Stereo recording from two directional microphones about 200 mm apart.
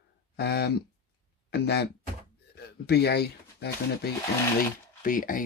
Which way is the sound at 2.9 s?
55° left (ahead or behind).